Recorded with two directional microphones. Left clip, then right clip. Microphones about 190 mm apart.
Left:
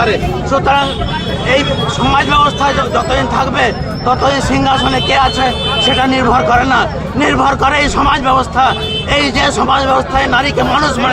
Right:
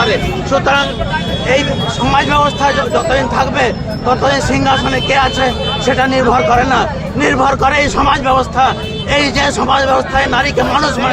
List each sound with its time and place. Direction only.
0.5 s speech: 25° left (ahead or behind)
2.0 s a man's voice: centre (ahead or behind)